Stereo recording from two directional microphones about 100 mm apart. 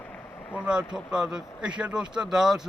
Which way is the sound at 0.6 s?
10° right (ahead or behind).